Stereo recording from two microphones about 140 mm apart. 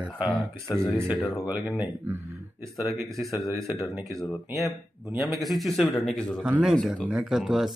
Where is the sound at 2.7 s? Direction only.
Centre (ahead or behind).